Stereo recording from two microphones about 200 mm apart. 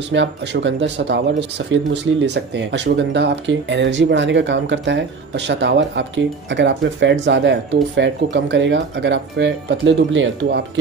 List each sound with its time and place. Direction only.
0.1 s speech: 65° right (ahead or behind)